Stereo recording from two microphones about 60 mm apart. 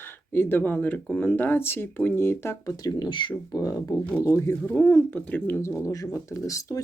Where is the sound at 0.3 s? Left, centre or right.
Left.